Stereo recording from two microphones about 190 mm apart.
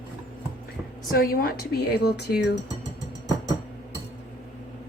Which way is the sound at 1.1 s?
50° left (ahead or behind).